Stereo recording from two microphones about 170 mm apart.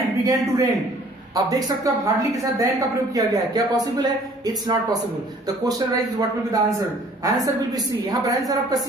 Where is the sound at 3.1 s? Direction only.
25° right (ahead or behind).